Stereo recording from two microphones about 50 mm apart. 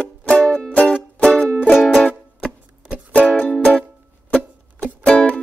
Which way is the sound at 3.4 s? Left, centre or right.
Left.